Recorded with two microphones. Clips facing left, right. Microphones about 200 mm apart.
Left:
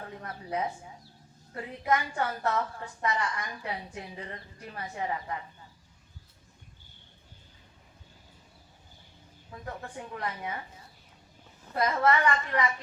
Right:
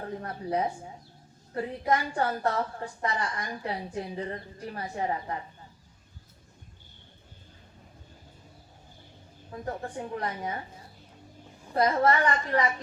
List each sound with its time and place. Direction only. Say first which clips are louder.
0.0 s a woman's voice: right 6 dB; 35° right (ahead or behind)
9.5 s a woman's voice: right 5 dB; 35° right (ahead or behind)
11.7 s a woman's voice: right 2 dB; 35° right (ahead or behind)